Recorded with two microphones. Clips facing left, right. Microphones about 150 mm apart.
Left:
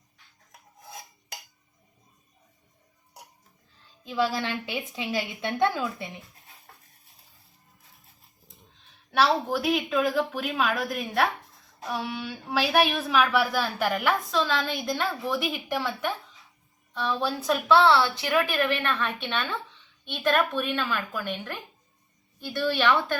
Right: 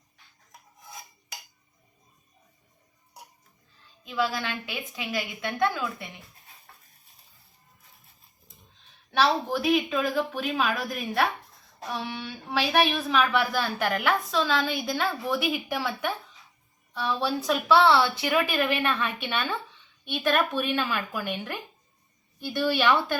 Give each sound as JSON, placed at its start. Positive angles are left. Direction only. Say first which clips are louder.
{"t": 4.0, "sound": "a woman's voice", "louder": "left 2 dB", "side_deg": 30}
{"t": 9.1, "sound": "a woman's voice", "louder": "left 1 dB", "side_deg": 5}